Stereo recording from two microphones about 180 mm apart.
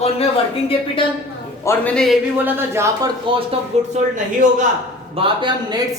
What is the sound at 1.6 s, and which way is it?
Speech, 5° left (ahead or behind).